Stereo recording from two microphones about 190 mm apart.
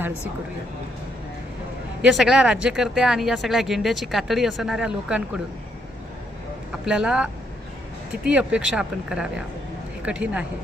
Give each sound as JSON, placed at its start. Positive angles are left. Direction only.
{"t": 2.0, "sound": "speech", "side_deg": -5}
{"t": 6.8, "sound": "a woman's voice", "side_deg": -5}